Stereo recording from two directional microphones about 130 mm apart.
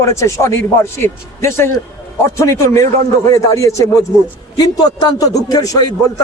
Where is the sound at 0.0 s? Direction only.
20° left (ahead or behind).